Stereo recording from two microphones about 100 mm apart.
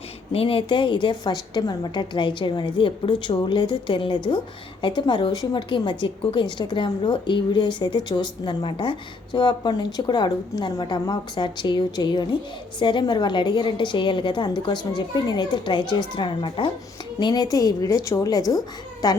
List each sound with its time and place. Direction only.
0.3 s a woman's voice: 65° left (ahead or behind); by 19.2 s 40° left (ahead or behind)